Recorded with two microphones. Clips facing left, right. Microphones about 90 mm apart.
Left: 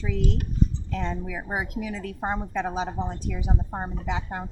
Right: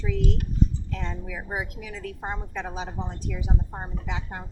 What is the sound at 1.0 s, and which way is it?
A woman's voice, 35° left (ahead or behind).